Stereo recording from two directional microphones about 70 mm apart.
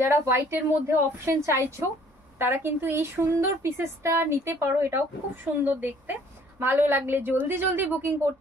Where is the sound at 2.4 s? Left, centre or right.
Right.